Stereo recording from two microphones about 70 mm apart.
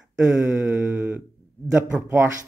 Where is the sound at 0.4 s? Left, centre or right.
Right.